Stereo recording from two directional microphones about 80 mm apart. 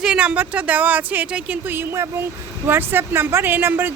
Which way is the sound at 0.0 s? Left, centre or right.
Centre.